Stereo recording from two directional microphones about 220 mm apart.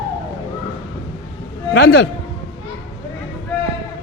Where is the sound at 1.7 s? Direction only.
55° left (ahead or behind).